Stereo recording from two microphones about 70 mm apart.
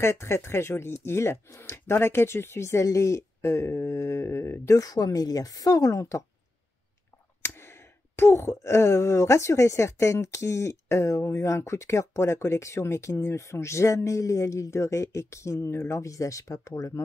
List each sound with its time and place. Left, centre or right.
0.0 s speech: left
4.7 s speech: left
7.4 s speech: left